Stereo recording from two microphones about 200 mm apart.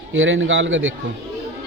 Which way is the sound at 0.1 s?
75° right (ahead or behind).